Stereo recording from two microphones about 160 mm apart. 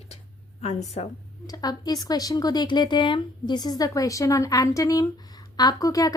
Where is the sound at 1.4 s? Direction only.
25° left (ahead or behind).